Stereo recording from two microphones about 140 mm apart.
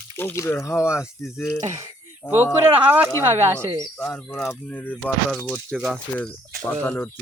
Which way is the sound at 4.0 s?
5° left (ahead or behind).